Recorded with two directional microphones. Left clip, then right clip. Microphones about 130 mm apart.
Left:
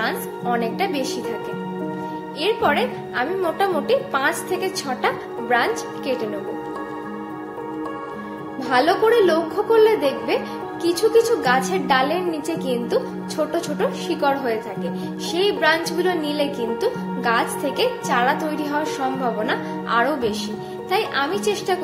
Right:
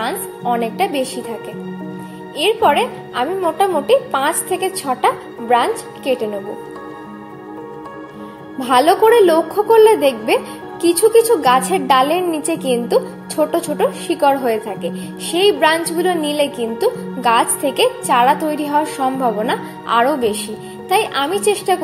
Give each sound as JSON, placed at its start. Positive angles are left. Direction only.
{"t": 0.0, "sound": "a woman's voice", "side_deg": -25}
{"t": 2.3, "sound": "a woman's voice", "side_deg": -25}
{"t": 8.5, "sound": "a woman's voice", "side_deg": -45}